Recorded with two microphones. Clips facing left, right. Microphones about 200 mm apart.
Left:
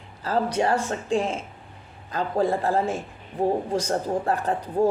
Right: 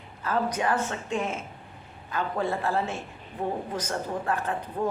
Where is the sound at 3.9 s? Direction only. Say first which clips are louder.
Left 3 dB; 35° left (ahead or behind).